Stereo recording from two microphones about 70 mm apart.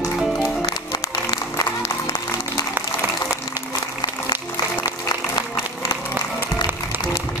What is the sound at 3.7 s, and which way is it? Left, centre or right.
Applause, left.